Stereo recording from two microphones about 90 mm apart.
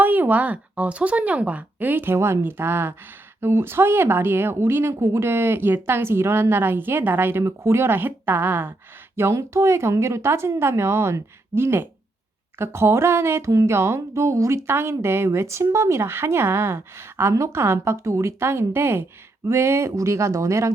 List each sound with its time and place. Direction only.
0.0 s speech: 20° right (ahead or behind)